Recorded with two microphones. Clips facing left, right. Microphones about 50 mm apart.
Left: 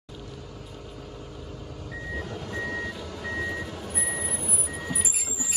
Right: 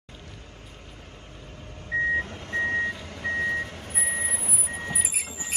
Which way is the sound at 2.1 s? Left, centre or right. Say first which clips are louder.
Right 5 dB; right.